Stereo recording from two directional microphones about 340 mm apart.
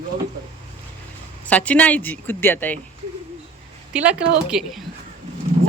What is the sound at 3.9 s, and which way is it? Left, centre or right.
Speech, centre.